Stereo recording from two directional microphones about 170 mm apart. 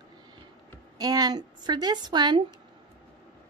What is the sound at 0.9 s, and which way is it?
Speech, 25° right (ahead or behind).